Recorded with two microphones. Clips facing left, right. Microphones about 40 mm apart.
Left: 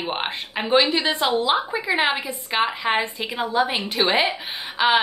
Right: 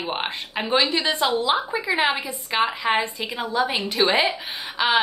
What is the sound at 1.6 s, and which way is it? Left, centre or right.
A woman's voice, centre.